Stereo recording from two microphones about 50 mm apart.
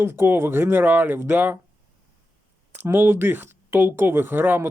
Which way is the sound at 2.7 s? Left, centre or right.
Right.